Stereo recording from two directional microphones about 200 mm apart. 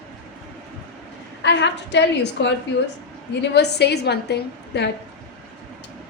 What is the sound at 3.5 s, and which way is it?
A woman's voice, 55° left (ahead or behind).